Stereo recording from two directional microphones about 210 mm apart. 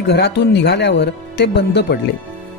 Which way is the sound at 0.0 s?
55° left (ahead or behind).